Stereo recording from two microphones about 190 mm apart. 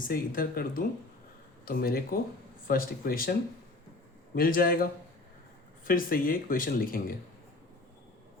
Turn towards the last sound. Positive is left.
turn(degrees=50)  # may be behind; listen again after turning